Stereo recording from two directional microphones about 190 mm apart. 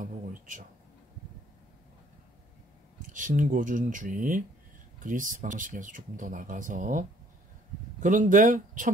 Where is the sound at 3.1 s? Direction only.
40° right (ahead or behind).